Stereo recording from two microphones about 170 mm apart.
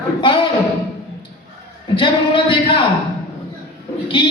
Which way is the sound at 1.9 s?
30° left (ahead or behind).